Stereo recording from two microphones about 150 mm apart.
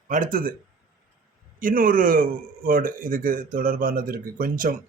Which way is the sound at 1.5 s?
70° right (ahead or behind).